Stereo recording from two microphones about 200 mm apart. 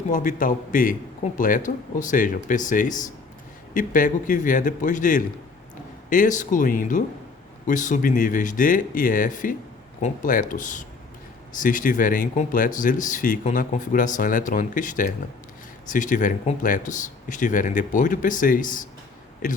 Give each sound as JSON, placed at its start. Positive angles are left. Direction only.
{"t": 0.1, "sound": "speech", "side_deg": 40}